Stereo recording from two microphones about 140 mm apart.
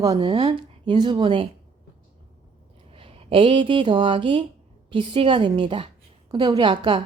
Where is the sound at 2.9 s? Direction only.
40° right (ahead or behind).